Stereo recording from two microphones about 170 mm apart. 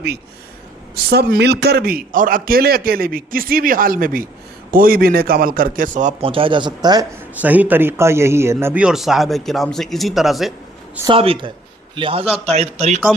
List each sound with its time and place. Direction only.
0.9 s a man's voice: 65° right (ahead or behind); by 6.1 s 45° right (ahead or behind)
6.2 s speech: 30° right (ahead or behind)
7.4 s a man's voice: 10° right (ahead or behind)
11.1 s a man's voice: 30° right (ahead or behind)